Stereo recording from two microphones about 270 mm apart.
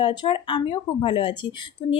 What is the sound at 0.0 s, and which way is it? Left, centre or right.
A woman's voice, centre.